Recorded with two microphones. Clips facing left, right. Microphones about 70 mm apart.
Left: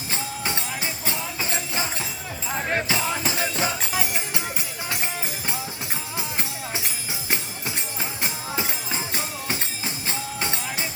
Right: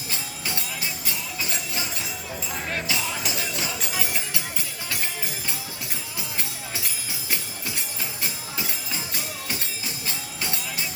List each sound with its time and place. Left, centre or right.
0.1 s music: left
6.1 s music: left